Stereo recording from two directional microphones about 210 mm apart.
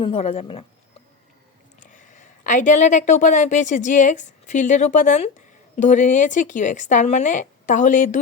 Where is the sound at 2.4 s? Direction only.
35° left (ahead or behind).